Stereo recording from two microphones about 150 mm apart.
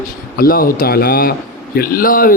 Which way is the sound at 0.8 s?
90° left.